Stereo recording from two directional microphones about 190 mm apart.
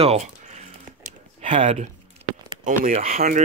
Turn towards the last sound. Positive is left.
turn(degrees=-35)  # may be behind; listen again after turning